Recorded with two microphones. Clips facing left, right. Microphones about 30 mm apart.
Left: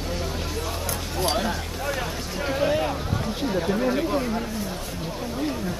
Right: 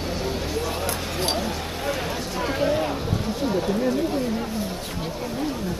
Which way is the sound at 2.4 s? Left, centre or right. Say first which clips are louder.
Even; centre.